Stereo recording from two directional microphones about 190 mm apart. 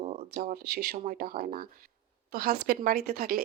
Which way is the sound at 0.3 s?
55° right (ahead or behind).